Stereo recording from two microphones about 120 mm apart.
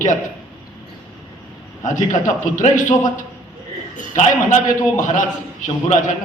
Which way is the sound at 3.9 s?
90° left.